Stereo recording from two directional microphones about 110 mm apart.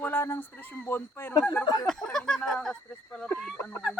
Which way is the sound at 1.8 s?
5° left (ahead or behind).